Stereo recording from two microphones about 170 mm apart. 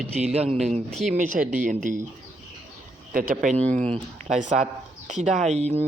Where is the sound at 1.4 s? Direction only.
50° right (ahead or behind).